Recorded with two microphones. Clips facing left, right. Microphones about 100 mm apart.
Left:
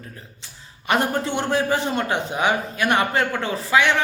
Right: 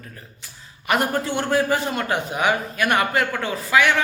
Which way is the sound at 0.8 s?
25° left (ahead or behind).